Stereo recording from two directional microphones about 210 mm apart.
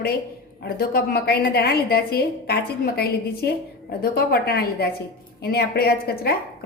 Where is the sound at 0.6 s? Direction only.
45° left (ahead or behind).